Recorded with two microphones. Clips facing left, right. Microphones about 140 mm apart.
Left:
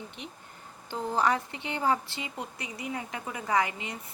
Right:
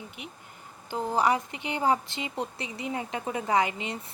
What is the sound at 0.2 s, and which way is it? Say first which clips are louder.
A woman's voice: even; 10° right (ahead or behind).